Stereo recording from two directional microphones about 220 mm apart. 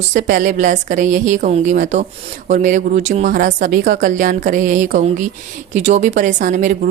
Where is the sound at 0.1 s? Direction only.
40° right (ahead or behind).